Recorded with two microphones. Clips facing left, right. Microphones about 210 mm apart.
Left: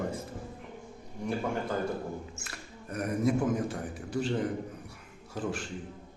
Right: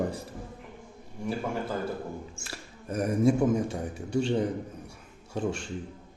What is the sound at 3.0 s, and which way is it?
A man's voice, 25° right (ahead or behind).